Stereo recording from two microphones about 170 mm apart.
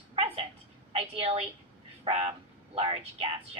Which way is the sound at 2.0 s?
35° right (ahead or behind).